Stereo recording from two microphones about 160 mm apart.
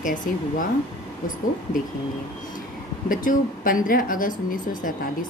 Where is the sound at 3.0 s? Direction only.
60° left (ahead or behind).